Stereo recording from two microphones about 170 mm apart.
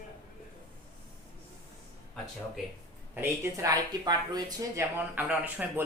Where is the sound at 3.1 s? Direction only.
15° right (ahead or behind).